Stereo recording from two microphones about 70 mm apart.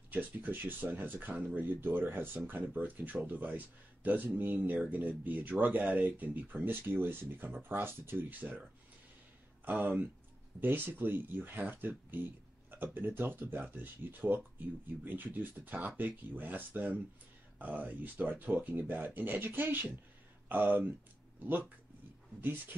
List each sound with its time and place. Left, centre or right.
0.1 s speech: right
9.7 s speech: right